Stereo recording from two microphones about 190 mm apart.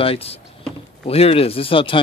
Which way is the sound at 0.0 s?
30° left (ahead or behind).